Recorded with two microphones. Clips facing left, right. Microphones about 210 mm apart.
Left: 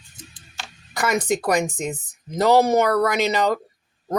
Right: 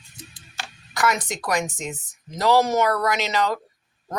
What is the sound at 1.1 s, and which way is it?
Speech, 55° left (ahead or behind).